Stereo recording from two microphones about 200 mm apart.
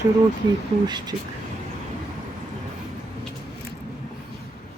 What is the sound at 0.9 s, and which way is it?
Speech, 20° right (ahead or behind).